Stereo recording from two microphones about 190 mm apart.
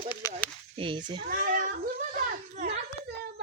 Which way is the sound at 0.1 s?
20° left (ahead or behind).